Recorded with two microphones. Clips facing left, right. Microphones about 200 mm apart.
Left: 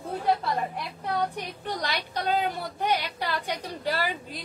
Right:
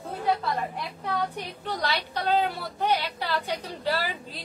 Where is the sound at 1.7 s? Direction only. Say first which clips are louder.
Right 2 dB; 15° left (ahead or behind).